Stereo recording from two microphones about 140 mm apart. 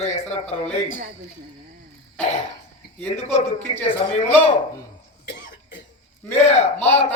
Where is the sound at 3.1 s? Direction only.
50° left (ahead or behind).